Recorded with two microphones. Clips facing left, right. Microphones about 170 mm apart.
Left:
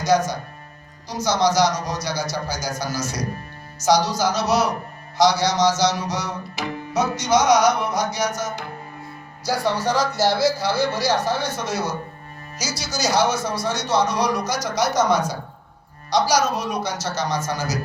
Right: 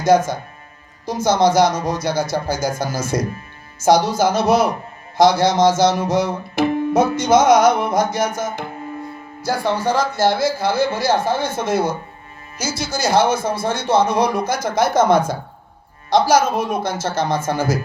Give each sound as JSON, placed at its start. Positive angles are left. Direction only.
{"t": 0.0, "sound": "music", "side_deg": -50}